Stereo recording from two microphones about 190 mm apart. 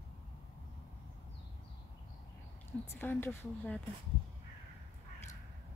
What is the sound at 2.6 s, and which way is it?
A woman's voice, 10° left (ahead or behind).